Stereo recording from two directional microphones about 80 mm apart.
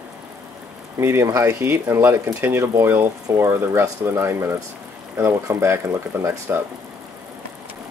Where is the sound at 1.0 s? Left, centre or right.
Right.